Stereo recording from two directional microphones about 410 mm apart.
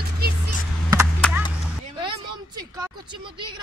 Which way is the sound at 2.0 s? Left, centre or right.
Centre.